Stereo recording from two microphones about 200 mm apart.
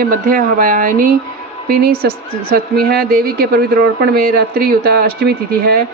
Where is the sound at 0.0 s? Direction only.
45° right (ahead or behind).